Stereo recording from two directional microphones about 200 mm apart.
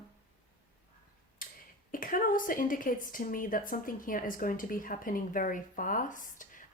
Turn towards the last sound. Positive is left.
turn(degrees=40)  # may be behind; listen again after turning